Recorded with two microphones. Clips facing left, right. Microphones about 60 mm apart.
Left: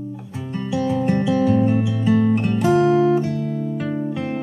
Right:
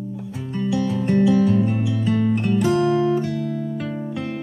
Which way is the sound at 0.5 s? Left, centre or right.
Centre.